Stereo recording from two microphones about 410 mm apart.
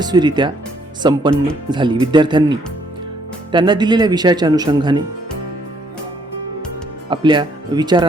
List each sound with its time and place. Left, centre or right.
0.0 s speech: centre
7.1 s speech: centre